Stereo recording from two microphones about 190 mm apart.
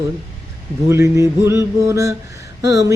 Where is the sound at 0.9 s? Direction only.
15° right (ahead or behind).